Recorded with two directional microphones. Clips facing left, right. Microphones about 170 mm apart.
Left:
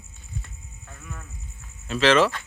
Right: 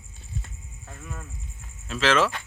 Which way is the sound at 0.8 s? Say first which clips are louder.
Right 2 dB; 30° right (ahead or behind).